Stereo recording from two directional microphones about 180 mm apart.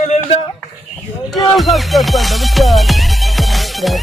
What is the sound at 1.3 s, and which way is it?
Music, centre (ahead or behind).